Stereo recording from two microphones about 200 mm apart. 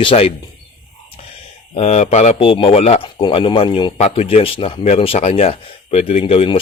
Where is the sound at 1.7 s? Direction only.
35° left (ahead or behind).